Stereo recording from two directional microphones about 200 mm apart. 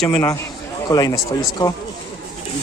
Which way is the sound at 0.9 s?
20° left (ahead or behind).